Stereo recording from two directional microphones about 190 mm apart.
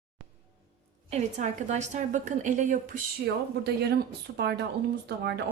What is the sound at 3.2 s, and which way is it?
Speech, 60° right (ahead or behind).